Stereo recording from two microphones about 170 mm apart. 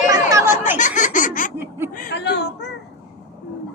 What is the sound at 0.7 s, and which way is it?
Laughter, 45° left (ahead or behind).